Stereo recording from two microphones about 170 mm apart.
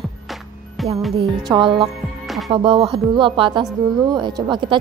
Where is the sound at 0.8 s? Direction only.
Centre (ahead or behind).